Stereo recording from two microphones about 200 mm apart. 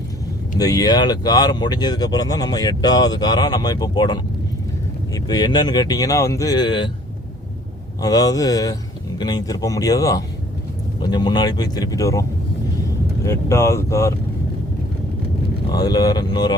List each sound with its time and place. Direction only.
0.6 s speech: 20° left (ahead or behind)
8.0 s speech: 20° left (ahead or behind)
13.2 s speech: 15° left (ahead or behind)
15.7 s speech: 20° left (ahead or behind)